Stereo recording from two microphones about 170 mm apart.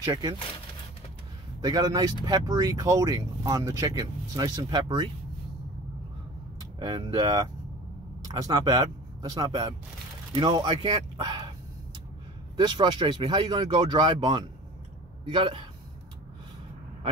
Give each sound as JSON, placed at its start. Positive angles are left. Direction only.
{"t": 0.0, "sound": "speech", "side_deg": -20}
{"t": 1.6, "sound": "speech", "side_deg": -25}
{"t": 6.6, "sound": "speech", "side_deg": -25}
{"t": 12.5, "sound": "speech", "side_deg": -25}